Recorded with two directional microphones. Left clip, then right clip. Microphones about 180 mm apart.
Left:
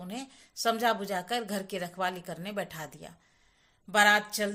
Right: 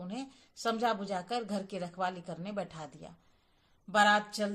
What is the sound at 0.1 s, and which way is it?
A woman's voice, 20° left (ahead or behind).